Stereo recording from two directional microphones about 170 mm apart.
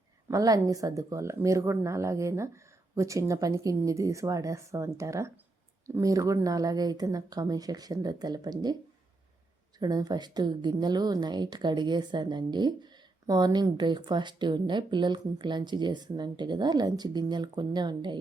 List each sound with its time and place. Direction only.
0.3 s a woman's voice: 20° right (ahead or behind)
9.7 s a woman's voice: 25° right (ahead or behind)